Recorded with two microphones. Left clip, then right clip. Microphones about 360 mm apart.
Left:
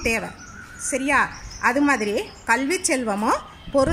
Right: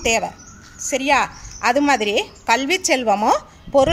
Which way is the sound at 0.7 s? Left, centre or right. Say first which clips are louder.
Right 3 dB; right.